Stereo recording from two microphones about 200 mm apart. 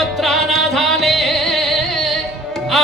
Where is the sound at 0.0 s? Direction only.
Centre (ahead or behind).